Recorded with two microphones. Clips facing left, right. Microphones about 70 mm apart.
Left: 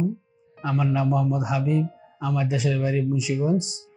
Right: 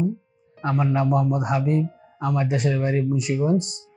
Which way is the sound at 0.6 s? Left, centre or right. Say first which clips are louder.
Right 2 dB; right.